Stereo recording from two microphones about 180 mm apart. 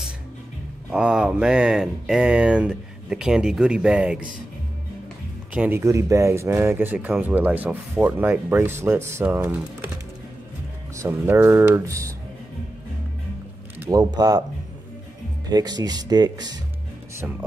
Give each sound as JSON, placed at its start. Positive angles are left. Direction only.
{"t": 0.9, "sound": "speech", "side_deg": -5}
{"t": 5.5, "sound": "speech", "side_deg": -10}
{"t": 11.0, "sound": "speech", "side_deg": -15}
{"t": 13.8, "sound": "speech", "side_deg": -20}
{"t": 15.5, "sound": "speech", "side_deg": -20}